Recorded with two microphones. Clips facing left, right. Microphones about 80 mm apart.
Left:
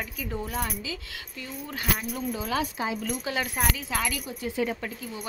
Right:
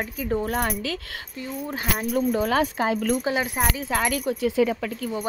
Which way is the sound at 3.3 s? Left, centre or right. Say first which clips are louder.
Right 4 dB; right.